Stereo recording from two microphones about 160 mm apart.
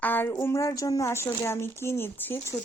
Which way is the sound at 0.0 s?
10° left (ahead or behind).